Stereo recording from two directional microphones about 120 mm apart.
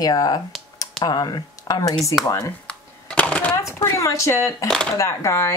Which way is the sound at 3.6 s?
25° left (ahead or behind).